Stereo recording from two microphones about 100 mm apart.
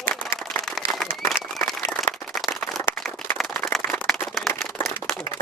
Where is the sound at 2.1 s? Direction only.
30° left (ahead or behind).